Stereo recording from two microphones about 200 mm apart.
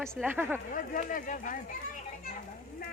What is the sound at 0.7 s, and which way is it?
Speech, 40° left (ahead or behind).